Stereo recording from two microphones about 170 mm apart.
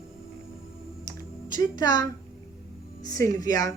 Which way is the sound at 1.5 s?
25° left (ahead or behind).